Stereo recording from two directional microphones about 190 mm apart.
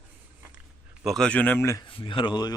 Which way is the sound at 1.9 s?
25° left (ahead or behind).